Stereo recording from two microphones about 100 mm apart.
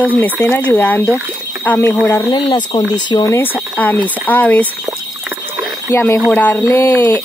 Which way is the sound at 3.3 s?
20° left (ahead or behind).